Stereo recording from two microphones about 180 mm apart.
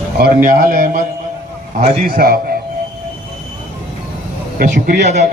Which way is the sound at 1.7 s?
30° right (ahead or behind).